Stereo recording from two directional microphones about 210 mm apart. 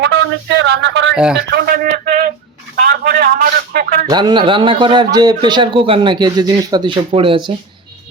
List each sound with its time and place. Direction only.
0.0 s speech: 55° right (ahead or behind)
1.1 s speech: 5° right (ahead or behind)
1.4 s a sound: 50° right (ahead or behind)
2.7 s a man's voice: 40° right (ahead or behind)
4.1 s a man's voice: 20° right (ahead or behind)